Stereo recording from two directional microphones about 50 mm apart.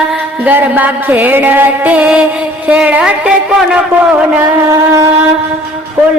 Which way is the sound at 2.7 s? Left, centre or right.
Right.